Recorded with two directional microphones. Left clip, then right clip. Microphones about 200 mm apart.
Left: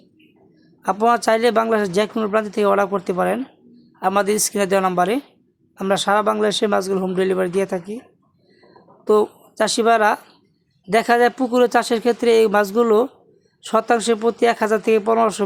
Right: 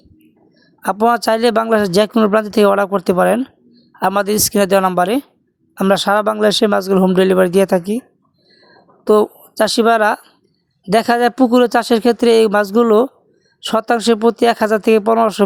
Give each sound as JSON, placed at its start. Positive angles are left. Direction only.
{"t": 0.8, "sound": "speech", "side_deg": -45}
{"t": 9.0, "sound": "speech", "side_deg": -40}